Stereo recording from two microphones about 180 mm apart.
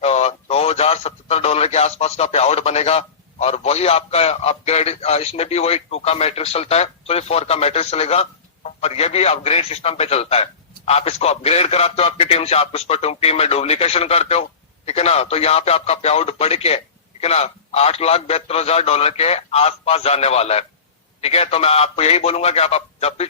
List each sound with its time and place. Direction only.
0.0 s a man's voice: 35° left (ahead or behind)